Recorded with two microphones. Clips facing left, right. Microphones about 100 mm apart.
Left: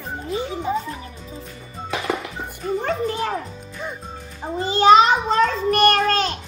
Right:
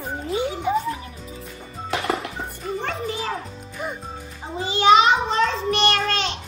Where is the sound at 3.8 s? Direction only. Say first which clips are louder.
Right 1 dB; 10° right (ahead or behind).